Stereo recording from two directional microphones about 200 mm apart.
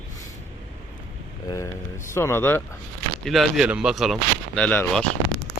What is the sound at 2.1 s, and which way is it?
Speech, 10° left (ahead or behind).